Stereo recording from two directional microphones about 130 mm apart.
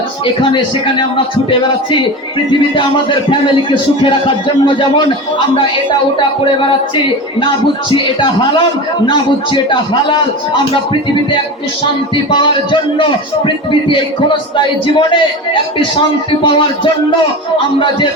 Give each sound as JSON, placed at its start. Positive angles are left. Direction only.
{"t": 0.5, "sound": "a man's voice", "side_deg": 40}
{"t": 6.4, "sound": "a man's voice", "side_deg": 40}
{"t": 12.1, "sound": "a man's voice", "side_deg": 40}
{"t": 16.4, "sound": "a man's voice", "side_deg": 40}